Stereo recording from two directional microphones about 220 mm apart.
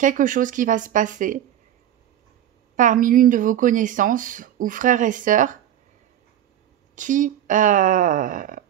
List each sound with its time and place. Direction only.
0.0 s speech: 35° right (ahead or behind)
2.7 s speech: 35° right (ahead or behind)
7.0 s speech: 35° right (ahead or behind)